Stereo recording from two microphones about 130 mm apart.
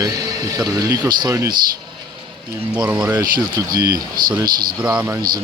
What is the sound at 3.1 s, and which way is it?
Speech, 25° right (ahead or behind).